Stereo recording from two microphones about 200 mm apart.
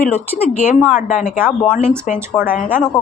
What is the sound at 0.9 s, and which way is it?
Speech, 40° left (ahead or behind).